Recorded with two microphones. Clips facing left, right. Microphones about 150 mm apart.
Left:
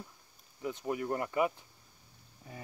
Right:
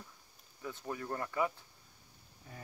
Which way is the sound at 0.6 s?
20° left (ahead or behind).